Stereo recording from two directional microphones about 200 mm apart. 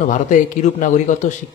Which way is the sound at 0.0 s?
40° left (ahead or behind).